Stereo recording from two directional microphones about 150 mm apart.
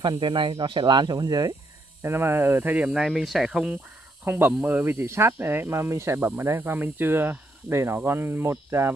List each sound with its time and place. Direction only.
0.0 s speech: 35° right (ahead or behind)
2.0 s speech: 15° right (ahead or behind)